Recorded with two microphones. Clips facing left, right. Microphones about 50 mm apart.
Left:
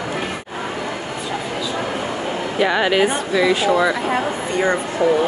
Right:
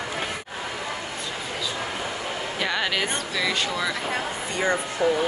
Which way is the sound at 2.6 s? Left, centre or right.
Centre.